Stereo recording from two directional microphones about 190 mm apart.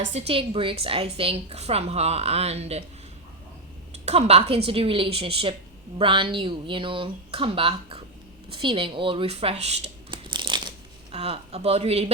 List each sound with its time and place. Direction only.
0.1 s a woman's voice: 35° right (ahead or behind)
4.0 s a woman's voice: 35° right (ahead or behind)